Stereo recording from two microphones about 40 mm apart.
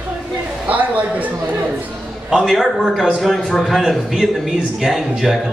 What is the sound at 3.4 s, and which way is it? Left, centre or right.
Speech, centre.